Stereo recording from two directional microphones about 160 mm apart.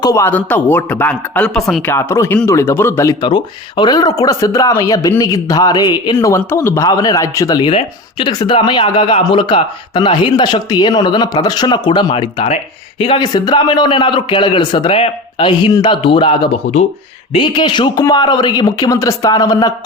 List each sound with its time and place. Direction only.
0.0 s speech: 20° left (ahead or behind); by 1.9 s 5° left (ahead or behind)
1.9 s speech: 15° left (ahead or behind)